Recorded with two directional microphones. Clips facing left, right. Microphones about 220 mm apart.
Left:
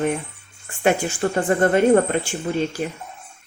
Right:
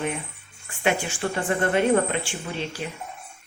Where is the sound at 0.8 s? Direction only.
45° left (ahead or behind).